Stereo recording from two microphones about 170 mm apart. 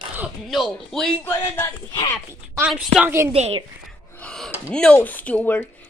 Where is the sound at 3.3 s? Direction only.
35° right (ahead or behind).